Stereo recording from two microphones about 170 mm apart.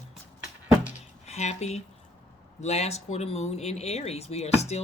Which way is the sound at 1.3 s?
40° left (ahead or behind).